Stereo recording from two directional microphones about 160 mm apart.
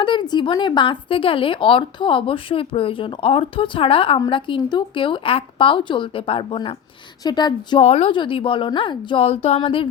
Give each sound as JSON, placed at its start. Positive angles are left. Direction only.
{"t": 0.0, "sound": "a woman's voice", "side_deg": 30}
{"t": 7.9, "sound": "a woman's voice", "side_deg": 40}